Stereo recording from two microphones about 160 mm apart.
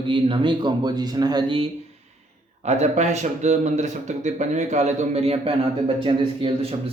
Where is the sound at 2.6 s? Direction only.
45° right (ahead or behind).